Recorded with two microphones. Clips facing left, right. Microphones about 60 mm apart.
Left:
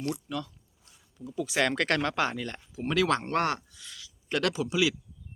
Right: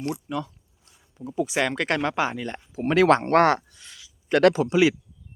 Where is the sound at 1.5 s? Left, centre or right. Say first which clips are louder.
Even; centre.